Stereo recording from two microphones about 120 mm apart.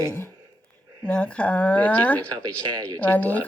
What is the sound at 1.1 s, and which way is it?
Speech, 10° left (ahead or behind).